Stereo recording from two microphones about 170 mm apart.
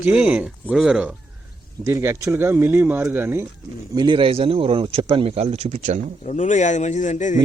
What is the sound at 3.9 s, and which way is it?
Speech, 30° right (ahead or behind).